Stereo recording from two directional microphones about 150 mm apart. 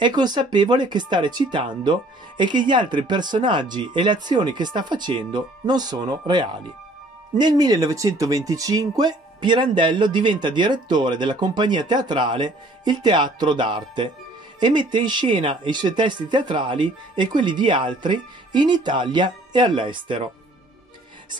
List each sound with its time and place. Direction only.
0.0 s speech: 30° right (ahead or behind)